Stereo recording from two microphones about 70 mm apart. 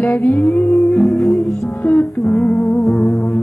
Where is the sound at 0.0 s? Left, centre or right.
Left.